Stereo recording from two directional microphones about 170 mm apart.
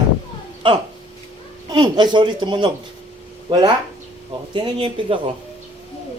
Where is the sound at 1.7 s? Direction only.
25° right (ahead or behind).